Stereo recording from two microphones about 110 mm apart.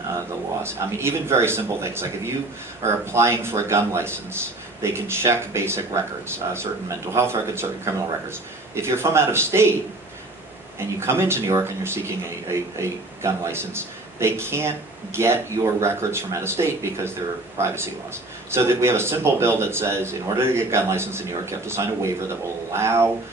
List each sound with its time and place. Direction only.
0.6 s a man's voice: 25° right (ahead or behind)
10.8 s a man's voice: 25° right (ahead or behind)